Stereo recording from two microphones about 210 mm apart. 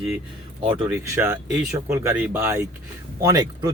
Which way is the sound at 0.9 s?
10° right (ahead or behind).